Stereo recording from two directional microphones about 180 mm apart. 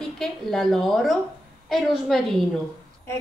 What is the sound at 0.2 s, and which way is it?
A woman's voice, centre (ahead or behind).